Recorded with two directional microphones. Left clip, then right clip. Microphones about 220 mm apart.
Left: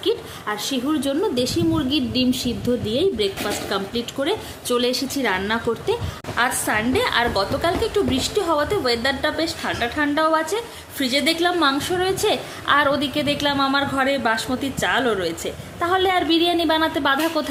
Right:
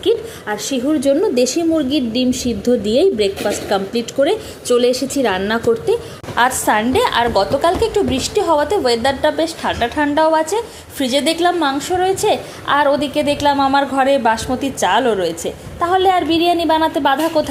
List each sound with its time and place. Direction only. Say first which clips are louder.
0.4 s a woman's voice: right 4 dB; 5° right (ahead or behind)
1.9 s speech: right 4 dB; 30° right (ahead or behind)
2.6 s a woman's voice: right 8 dB; 15° right (ahead or behind)